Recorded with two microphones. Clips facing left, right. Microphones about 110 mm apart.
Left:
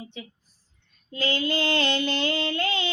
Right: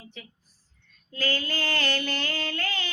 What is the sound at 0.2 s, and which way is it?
Speech, 20° left (ahead or behind).